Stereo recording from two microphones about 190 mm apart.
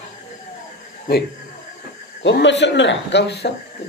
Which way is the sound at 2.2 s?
65° left (ahead or behind).